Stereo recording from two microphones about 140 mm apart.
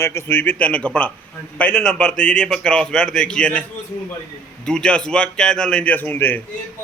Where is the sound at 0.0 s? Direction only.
20° left (ahead or behind).